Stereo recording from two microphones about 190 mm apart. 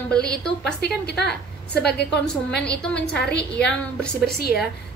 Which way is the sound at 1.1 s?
60° left (ahead or behind).